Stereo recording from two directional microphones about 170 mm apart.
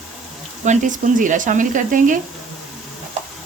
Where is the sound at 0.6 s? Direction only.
50° right (ahead or behind).